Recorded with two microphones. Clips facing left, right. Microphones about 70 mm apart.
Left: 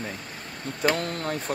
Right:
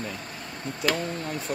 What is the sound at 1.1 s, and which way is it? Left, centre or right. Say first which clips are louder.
Speech: left 2 dB; left.